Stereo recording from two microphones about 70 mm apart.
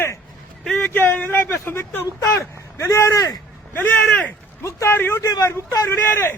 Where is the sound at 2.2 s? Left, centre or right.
Left.